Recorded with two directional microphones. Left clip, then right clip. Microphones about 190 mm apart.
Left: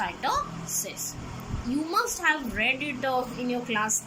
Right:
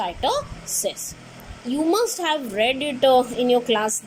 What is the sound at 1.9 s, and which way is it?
A woman's voice, 20° right (ahead or behind).